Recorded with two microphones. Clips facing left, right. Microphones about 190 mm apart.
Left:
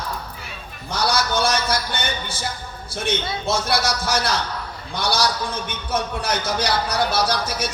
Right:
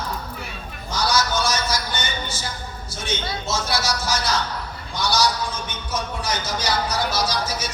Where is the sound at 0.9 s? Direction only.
60° left (ahead or behind).